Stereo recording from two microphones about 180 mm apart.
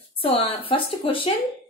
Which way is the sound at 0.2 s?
30° left (ahead or behind).